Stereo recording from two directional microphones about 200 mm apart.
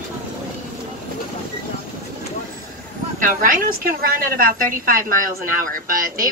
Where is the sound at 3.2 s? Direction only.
45° right (ahead or behind).